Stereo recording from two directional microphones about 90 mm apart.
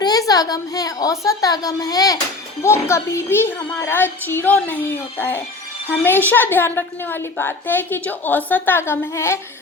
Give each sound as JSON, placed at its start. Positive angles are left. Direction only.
{"t": 0.0, "sound": "a woman's voice", "side_deg": 45}
{"t": 2.6, "sound": "a woman's voice", "side_deg": 30}